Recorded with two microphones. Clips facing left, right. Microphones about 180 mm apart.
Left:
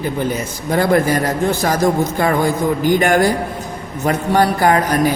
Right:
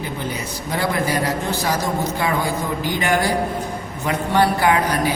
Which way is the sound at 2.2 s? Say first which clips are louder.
Left 8 dB; 50° left (ahead or behind).